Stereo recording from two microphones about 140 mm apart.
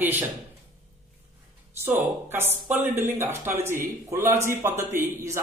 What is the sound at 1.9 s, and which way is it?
A man's voice, 15° right (ahead or behind).